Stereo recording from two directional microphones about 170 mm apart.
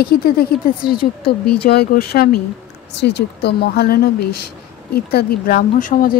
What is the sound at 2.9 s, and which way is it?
Speech, 85° left.